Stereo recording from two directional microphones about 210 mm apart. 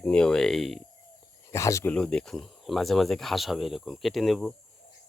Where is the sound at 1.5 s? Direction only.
15° left (ahead or behind).